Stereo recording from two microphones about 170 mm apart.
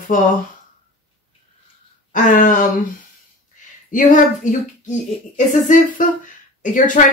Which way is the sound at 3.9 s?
50° left (ahead or behind).